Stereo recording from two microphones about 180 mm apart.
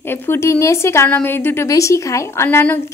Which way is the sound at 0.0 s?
10° left (ahead or behind).